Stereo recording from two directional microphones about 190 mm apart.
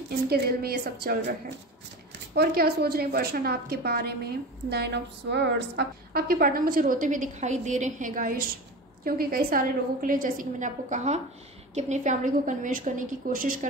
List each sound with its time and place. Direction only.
0.3 s a woman's voice: 55° right (ahead or behind)
2.3 s a woman's voice: 55° right (ahead or behind)